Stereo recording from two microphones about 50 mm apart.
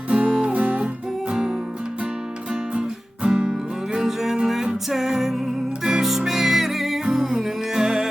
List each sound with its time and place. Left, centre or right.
0.1 s music: right
1.3 s music: centre
3.2 s music: centre